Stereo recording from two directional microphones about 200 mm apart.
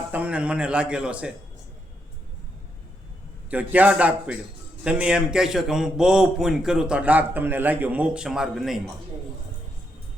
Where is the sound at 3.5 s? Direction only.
10° right (ahead or behind).